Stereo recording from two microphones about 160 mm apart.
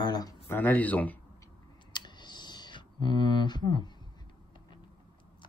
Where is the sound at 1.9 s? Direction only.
25° left (ahead or behind).